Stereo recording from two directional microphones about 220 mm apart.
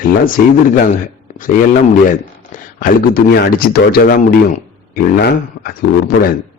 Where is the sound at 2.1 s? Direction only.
35° left (ahead or behind).